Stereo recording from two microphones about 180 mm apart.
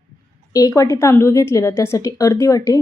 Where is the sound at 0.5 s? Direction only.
20° left (ahead or behind).